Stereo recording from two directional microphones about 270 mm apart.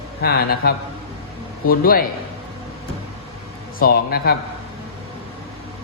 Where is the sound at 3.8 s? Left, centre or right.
Left.